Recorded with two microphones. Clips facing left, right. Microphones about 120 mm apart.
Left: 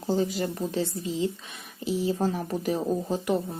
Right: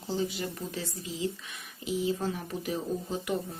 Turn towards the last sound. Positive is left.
turn(degrees=40)  # may be behind; listen again after turning